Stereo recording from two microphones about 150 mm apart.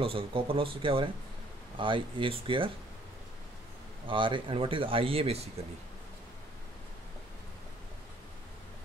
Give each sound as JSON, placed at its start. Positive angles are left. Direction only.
{"t": 0.0, "sound": "speech", "side_deg": -35}
{"t": 4.1, "sound": "speech", "side_deg": -35}